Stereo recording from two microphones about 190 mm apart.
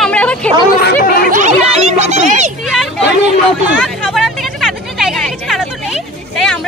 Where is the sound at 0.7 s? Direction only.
55° left (ahead or behind).